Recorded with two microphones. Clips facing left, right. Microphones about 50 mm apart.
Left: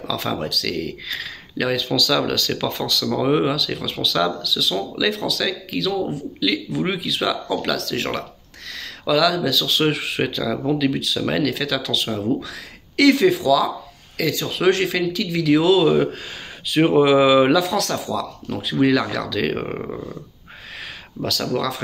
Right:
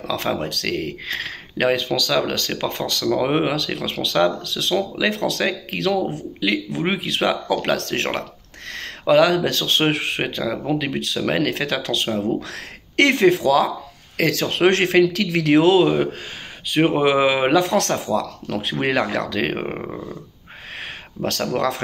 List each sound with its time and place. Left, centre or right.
0.1 s speech: right
10.2 s speech: right
10.7 s speech: right
14.3 s speech: right
14.6 s speech: right
15.8 s speech: right
17.6 s speech: right
18.9 s speech: right
19.8 s a sound: centre
21.2 s speech: right